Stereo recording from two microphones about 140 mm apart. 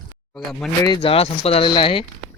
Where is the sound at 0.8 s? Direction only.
35° left (ahead or behind).